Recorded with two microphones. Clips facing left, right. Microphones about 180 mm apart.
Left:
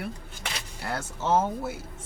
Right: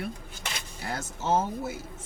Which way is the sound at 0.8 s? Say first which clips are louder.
Left 1 dB; 60° left (ahead or behind).